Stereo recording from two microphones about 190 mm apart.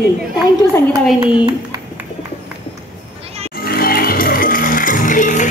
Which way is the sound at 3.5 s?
50° left (ahead or behind).